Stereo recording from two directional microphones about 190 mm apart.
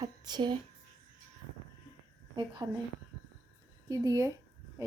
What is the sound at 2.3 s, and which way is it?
Speech, 25° right (ahead or behind).